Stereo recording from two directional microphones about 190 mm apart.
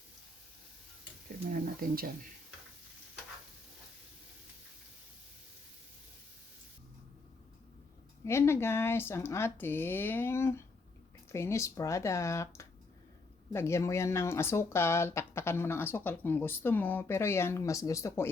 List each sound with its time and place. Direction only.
1.5 s speech: 50° right (ahead or behind)
8.2 s speech: 15° left (ahead or behind)